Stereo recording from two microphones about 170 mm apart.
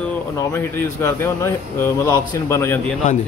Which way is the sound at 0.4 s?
15° left (ahead or behind).